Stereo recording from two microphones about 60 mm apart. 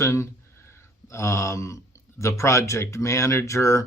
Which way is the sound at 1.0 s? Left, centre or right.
Left.